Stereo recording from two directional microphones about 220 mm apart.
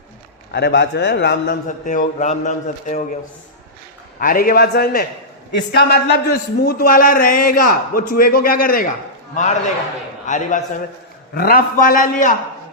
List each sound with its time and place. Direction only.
0.5 s a man's voice: 50° left (ahead or behind)
1.9 s a man's voice: 35° left (ahead or behind)
4.2 s a man's voice: 40° left (ahead or behind)